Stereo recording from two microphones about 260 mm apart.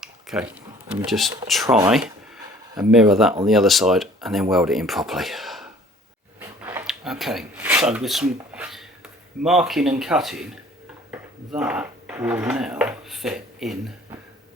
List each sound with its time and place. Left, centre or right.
0.0 s speech: centre
6.4 s a sound: centre
9.4 s speech: centre